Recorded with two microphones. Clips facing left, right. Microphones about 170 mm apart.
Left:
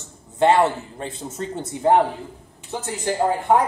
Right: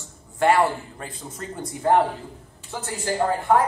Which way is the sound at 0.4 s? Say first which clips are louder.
Left 2 dB; 20° left (ahead or behind).